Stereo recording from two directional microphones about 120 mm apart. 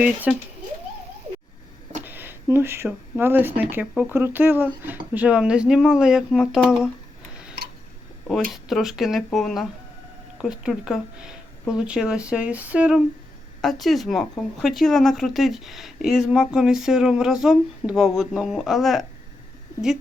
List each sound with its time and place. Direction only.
0.0 s speech: 10° right (ahead or behind)
2.0 s speech: 15° right (ahead or behind)
8.3 s a woman's voice: centre (ahead or behind)
13.6 s a woman's voice: centre (ahead or behind)